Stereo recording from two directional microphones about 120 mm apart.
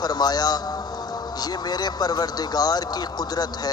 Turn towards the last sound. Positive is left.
turn(degrees=35)  # may be behind; listen again after turning